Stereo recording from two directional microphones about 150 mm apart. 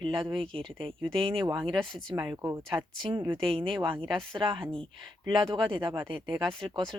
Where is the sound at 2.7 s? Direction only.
35° right (ahead or behind).